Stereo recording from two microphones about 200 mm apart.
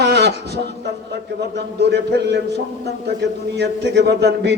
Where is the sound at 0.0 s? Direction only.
55° right (ahead or behind).